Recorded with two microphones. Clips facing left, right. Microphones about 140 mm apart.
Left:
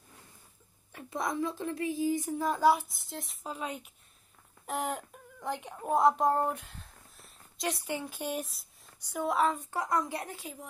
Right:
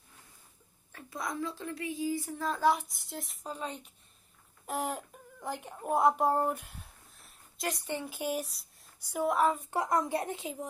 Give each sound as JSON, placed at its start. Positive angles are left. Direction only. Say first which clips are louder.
{"t": 0.9, "sound": "a child's voice", "louder": "left 4 dB", "side_deg": 20}
{"t": 2.0, "sound": "a sound", "louder": "left 2 dB", "side_deg": 20}
{"t": 4.6, "sound": "speech", "louder": "left 1 dB", "side_deg": 0}
{"t": 7.2, "sound": "a sound", "louder": "left 1 dB", "side_deg": 0}
{"t": 8.0, "sound": "a woman's voice", "louder": "right 1 dB", "side_deg": -5}
{"t": 9.7, "sound": "a woman's voice", "louder": "right 2 dB", "side_deg": -25}